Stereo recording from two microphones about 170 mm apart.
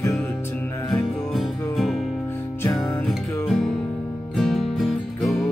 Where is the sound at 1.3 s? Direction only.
Centre (ahead or behind).